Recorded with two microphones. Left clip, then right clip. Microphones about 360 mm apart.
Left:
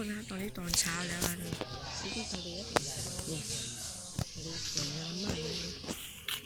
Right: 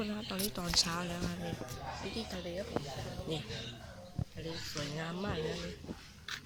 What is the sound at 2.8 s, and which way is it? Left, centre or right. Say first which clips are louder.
Speech: left 11 dB; left.